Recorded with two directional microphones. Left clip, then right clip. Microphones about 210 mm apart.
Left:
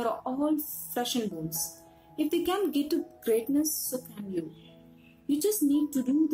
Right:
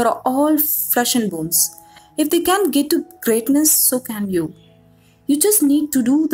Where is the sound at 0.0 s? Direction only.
40° right (ahead or behind).